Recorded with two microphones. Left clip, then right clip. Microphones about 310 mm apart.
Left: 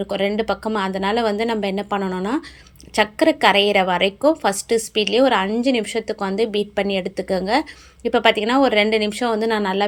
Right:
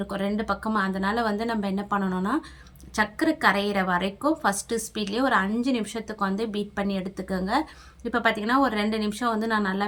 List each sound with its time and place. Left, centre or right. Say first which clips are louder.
0.1 s speech: left 8 dB; centre